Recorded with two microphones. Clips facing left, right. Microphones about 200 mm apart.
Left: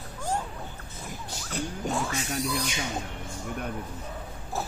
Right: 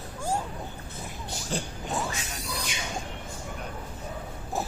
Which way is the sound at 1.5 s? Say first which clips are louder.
Even; 30° right (ahead or behind).